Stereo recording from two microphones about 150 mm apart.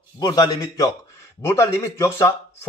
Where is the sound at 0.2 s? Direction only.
25° left (ahead or behind).